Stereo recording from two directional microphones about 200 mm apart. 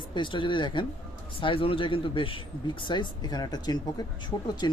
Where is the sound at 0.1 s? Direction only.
25° left (ahead or behind).